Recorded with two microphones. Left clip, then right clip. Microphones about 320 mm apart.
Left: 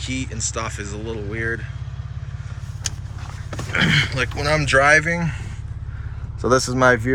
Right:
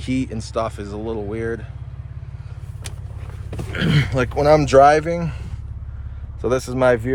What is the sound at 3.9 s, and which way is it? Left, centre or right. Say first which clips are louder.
Speech: left 2 dB; centre.